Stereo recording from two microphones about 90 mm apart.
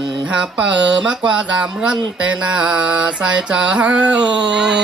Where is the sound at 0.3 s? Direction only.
10° right (ahead or behind).